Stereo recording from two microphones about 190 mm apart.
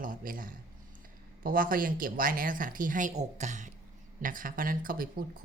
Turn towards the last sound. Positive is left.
turn(degrees=-50)  # may be behind; listen again after turning